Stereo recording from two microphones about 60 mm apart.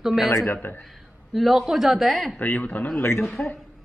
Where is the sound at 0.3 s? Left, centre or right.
Left.